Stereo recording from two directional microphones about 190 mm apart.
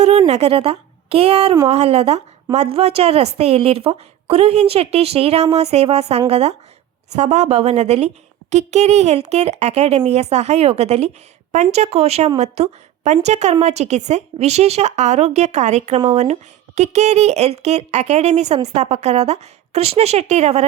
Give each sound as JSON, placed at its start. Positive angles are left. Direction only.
{"t": 0.3, "sound": "a woman's voice", "side_deg": -35}